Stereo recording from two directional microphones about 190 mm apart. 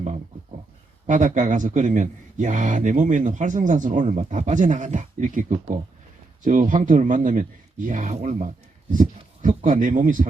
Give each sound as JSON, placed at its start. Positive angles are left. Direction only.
{"t": 1.0, "sound": "a man's voice", "side_deg": -40}